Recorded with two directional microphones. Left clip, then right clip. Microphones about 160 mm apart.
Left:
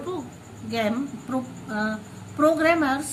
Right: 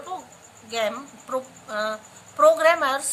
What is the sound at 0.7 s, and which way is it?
A woman's voice, 25° right (ahead or behind).